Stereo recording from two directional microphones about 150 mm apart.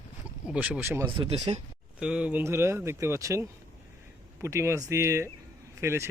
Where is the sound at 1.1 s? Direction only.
35° right (ahead or behind).